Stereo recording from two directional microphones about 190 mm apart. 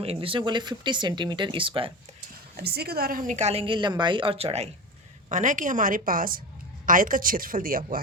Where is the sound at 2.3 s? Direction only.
55° right (ahead or behind).